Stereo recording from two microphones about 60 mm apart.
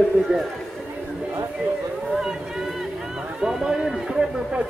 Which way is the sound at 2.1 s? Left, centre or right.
Centre.